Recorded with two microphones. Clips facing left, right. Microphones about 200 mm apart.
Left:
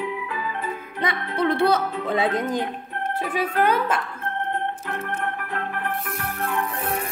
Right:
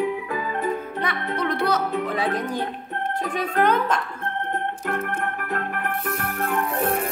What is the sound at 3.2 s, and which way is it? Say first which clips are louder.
Speech: even; 5° left (ahead or behind).